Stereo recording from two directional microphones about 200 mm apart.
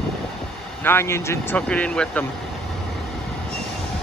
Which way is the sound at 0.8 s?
10° left (ahead or behind).